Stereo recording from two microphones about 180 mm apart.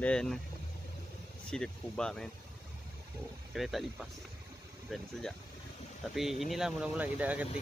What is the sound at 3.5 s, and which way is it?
Speech, centre (ahead or behind).